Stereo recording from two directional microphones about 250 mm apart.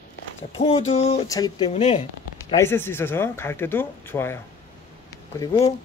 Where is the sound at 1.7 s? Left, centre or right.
Left.